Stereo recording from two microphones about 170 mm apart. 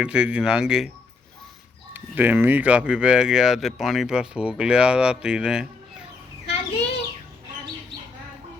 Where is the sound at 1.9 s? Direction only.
10° right (ahead or behind).